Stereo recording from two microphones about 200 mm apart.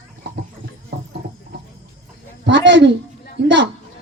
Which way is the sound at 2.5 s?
60° right (ahead or behind).